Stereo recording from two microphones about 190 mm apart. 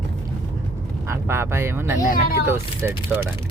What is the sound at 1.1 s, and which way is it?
Speech, 15° right (ahead or behind).